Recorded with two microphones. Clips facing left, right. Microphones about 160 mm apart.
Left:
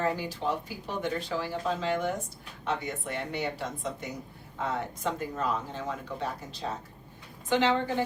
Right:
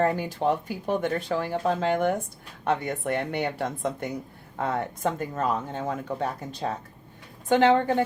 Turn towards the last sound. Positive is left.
turn(degrees=-55)  # may be behind; listen again after turning